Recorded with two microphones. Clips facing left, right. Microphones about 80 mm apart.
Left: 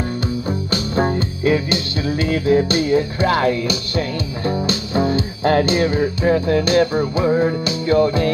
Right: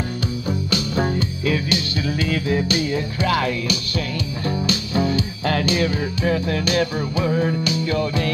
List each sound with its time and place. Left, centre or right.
0.5 s music: left